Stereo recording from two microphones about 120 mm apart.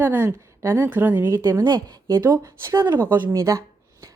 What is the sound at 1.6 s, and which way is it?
Speech, 35° right (ahead or behind).